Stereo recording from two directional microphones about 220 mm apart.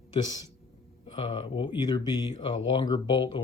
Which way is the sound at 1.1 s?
20° left (ahead or behind).